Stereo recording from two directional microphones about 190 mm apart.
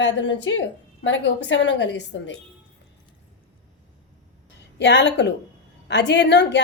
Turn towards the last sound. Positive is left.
turn(degrees=65)  # may be behind; listen again after turning